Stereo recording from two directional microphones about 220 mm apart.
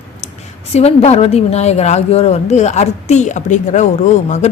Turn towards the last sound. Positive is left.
turn(degrees=30)  # may be behind; listen again after turning